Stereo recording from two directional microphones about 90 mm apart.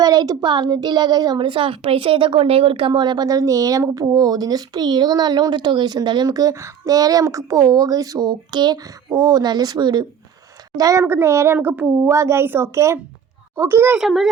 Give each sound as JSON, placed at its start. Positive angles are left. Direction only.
{"t": 0.0, "sound": "a woman's voice", "side_deg": -45}
{"t": 10.8, "sound": "speech", "side_deg": -40}
{"t": 11.0, "sound": "speech", "side_deg": -30}
{"t": 12.0, "sound": "speech", "side_deg": -30}
{"t": 14.0, "sound": "speech", "side_deg": 0}